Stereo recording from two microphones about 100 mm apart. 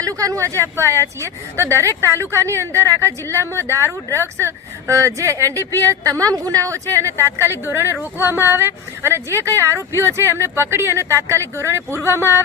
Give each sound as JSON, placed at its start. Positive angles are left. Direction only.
{"t": 0.0, "sound": "a woman's voice", "side_deg": -35}